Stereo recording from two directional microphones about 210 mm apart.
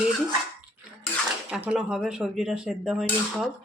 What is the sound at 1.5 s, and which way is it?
Speech, 5° right (ahead or behind).